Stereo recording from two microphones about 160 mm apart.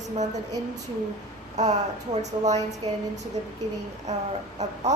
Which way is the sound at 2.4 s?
45° right (ahead or behind).